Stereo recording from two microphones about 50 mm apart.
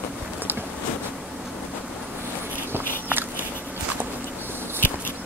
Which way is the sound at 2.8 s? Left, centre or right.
Left.